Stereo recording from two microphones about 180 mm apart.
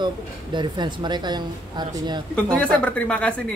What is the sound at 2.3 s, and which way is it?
A woman's voice, 5° left (ahead or behind).